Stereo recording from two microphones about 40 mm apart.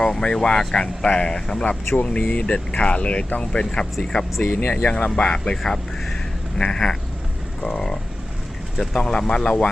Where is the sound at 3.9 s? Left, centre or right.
Centre.